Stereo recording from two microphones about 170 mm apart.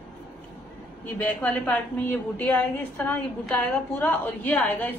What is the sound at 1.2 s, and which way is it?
A woman's voice, 10° left (ahead or behind).